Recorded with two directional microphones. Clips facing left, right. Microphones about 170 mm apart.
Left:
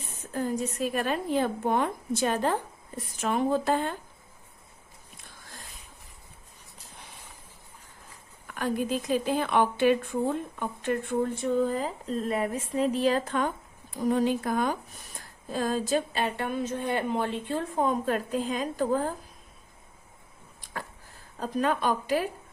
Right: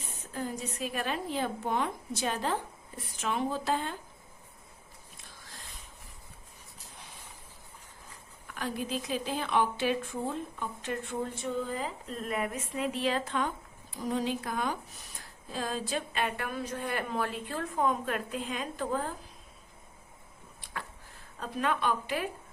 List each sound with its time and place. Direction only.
0.3 s speech: 45° left (ahead or behind)
8.4 s a woman's voice: 50° left (ahead or behind)
21.3 s a woman's voice: 40° left (ahead or behind)